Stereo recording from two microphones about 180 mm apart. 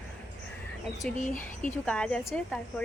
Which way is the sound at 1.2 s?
45° left (ahead or behind).